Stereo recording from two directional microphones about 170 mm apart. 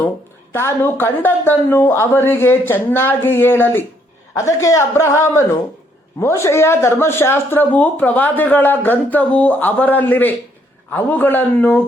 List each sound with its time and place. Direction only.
0.5 s speech: 15° left (ahead or behind)